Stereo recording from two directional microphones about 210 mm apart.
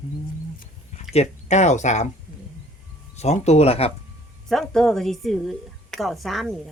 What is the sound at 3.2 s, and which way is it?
Speech, 30° left (ahead or behind).